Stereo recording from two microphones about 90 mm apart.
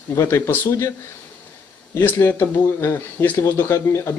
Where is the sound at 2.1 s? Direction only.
25° left (ahead or behind).